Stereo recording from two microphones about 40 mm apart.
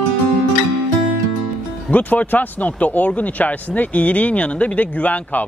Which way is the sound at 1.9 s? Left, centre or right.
Left.